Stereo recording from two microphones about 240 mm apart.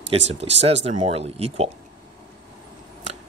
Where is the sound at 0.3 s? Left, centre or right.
Right.